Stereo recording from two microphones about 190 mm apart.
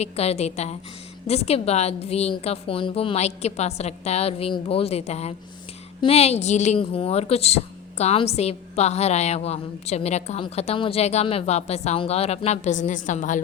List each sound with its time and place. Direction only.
0.0 s a woman's voice: 35° left (ahead or behind)